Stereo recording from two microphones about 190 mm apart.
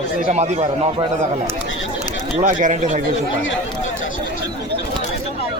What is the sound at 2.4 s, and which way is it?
Speech, 40° right (ahead or behind).